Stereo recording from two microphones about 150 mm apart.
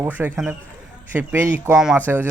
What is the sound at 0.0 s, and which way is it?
A man's voice, 15° right (ahead or behind).